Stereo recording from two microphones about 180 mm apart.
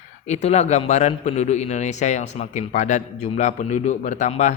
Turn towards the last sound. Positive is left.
turn(degrees=40)  # may be behind; listen again after turning